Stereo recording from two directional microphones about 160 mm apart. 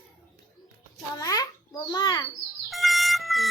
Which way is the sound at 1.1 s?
20° left (ahead or behind).